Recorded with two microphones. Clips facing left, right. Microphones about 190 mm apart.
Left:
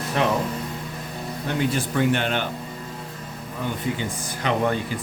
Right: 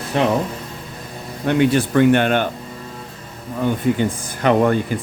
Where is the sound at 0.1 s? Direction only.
30° right (ahead or behind).